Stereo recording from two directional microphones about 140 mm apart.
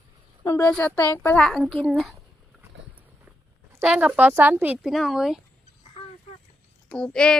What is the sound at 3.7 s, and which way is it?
A woman's voice, 10° right (ahead or behind).